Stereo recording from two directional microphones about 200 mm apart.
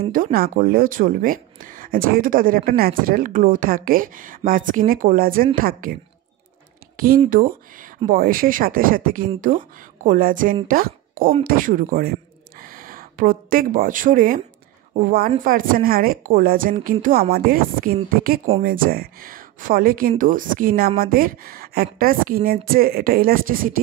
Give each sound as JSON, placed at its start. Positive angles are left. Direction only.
{"t": 0.1, "sound": "speech", "side_deg": -45}
{"t": 7.2, "sound": "a man's voice", "side_deg": -45}